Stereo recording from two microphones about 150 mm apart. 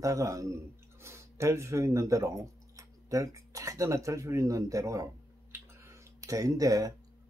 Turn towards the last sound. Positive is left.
turn(degrees=-25)  # may be behind; listen again after turning